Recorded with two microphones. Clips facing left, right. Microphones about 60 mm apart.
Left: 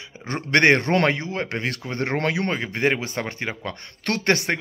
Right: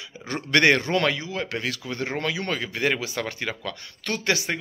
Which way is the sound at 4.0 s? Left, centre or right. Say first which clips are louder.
Left 4 dB; left.